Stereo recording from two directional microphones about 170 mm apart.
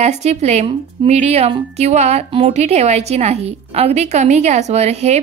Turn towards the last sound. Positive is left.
turn(degrees=-40)  # may be behind; listen again after turning